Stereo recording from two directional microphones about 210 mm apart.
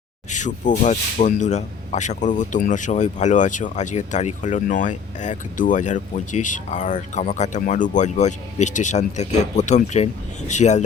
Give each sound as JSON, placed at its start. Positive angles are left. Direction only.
{"t": 0.3, "sound": "speech", "side_deg": 35}